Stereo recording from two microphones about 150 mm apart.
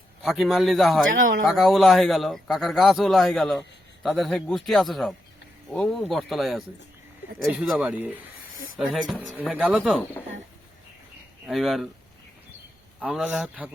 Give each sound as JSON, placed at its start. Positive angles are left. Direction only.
{"t": 0.3, "sound": "speech", "side_deg": 0}
{"t": 1.1, "sound": "speech", "side_deg": -60}
{"t": 1.5, "sound": "speech", "side_deg": 0}
{"t": 7.7, "sound": "speech", "side_deg": -10}
{"t": 11.4, "sound": "speech", "side_deg": 0}
{"t": 13.0, "sound": "speech", "side_deg": -5}